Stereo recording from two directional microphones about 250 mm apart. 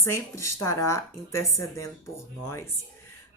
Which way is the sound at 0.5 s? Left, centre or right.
Centre.